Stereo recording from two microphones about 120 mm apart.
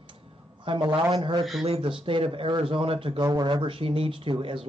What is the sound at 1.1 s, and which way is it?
Speech, 45° right (ahead or behind).